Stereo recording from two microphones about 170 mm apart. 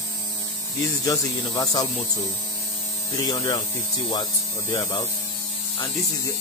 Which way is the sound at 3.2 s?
25° left (ahead or behind).